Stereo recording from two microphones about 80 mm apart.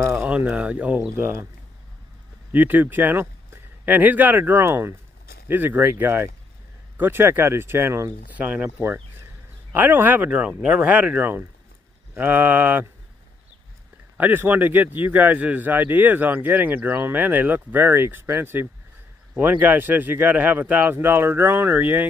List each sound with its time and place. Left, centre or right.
0.3 s a man's voice: centre
2.5 s a man's voice: right
8.3 s a man's voice: centre
14.1 s a man's voice: right